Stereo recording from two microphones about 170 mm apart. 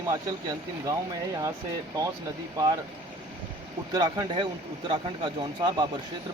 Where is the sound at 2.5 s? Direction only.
20° right (ahead or behind).